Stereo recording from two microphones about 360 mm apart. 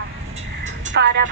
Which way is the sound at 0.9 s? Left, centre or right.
Right.